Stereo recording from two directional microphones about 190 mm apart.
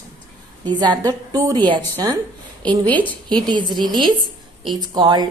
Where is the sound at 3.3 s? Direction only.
25° right (ahead or behind).